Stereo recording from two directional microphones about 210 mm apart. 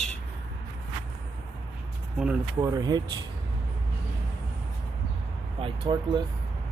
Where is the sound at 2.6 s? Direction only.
20° right (ahead or behind).